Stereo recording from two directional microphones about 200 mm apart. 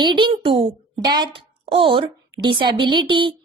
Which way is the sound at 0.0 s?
25° right (ahead or behind).